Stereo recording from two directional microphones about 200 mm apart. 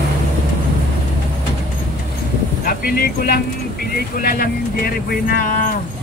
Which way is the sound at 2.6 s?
45° left (ahead or behind).